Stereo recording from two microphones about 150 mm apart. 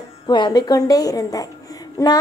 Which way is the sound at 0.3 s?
30° left (ahead or behind).